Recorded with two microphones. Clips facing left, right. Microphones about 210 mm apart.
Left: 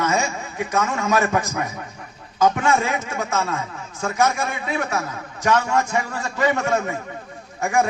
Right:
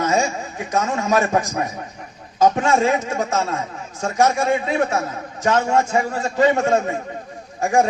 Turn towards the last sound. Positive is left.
turn(degrees=-30)  # may be behind; listen again after turning